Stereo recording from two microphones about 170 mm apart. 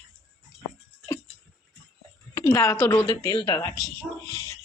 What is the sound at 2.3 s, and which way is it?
A woman's voice, 15° left (ahead or behind).